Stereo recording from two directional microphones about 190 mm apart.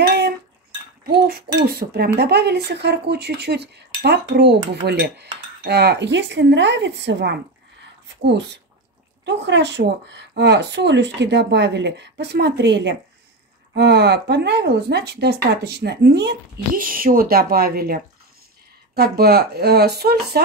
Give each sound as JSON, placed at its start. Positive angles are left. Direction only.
{"t": 0.0, "sound": "cutlery", "side_deg": -60}
{"t": 1.1, "sound": "speech", "side_deg": -55}
{"t": 9.2, "sound": "speech", "side_deg": -65}